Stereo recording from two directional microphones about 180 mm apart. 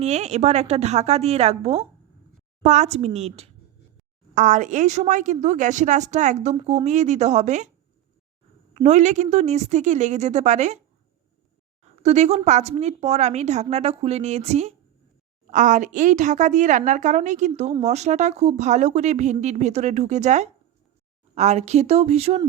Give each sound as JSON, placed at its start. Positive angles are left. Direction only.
{"t": 0.0, "sound": "a woman's voice", "side_deg": -40}
{"t": 4.4, "sound": "a woman's voice", "side_deg": -45}
{"t": 8.7, "sound": "a woman's voice", "side_deg": -40}
{"t": 11.8, "sound": "a sound", "side_deg": -40}
{"t": 12.5, "sound": "a woman's voice", "side_deg": -40}